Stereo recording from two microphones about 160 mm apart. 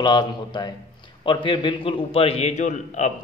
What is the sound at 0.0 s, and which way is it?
A man's voice, 25° left (ahead or behind).